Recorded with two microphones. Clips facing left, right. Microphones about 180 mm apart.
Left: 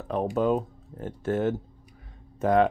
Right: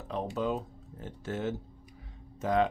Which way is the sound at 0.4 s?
55° left (ahead or behind).